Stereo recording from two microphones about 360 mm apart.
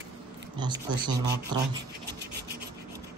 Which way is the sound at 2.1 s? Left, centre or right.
Right.